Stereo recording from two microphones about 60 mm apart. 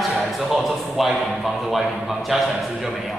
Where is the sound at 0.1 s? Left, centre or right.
Centre.